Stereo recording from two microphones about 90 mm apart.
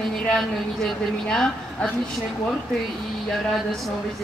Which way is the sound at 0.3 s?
5° left (ahead or behind).